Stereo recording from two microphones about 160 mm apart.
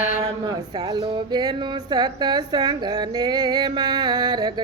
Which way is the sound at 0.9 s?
25° right (ahead or behind).